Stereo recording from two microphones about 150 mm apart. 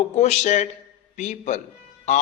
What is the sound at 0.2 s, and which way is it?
A man's voice, 50° left (ahead or behind).